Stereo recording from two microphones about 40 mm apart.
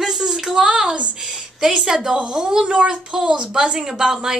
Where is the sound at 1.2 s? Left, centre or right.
Centre.